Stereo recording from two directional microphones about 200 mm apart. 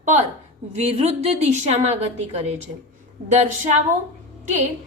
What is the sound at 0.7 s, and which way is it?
A woman's voice, 30° right (ahead or behind).